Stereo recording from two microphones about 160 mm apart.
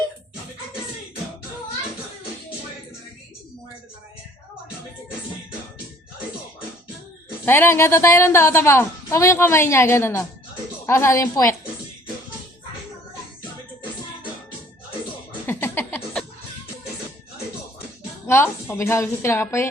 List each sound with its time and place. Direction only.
7.4 s speech: 15° left (ahead or behind)
15.4 s a sound: 15° left (ahead or behind)
18.3 s a woman's voice: 15° left (ahead or behind)